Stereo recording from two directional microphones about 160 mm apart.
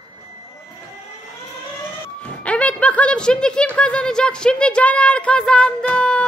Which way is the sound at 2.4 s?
10° left (ahead or behind).